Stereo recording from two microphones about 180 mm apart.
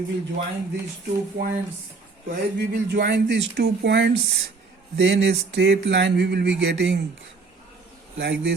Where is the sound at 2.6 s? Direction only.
65° right (ahead or behind).